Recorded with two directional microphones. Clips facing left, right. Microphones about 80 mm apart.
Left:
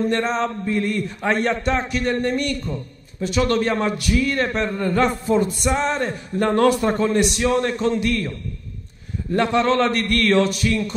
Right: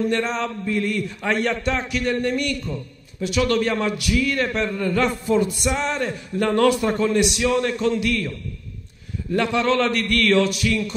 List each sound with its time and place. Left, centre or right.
0.0 s a man's voice: left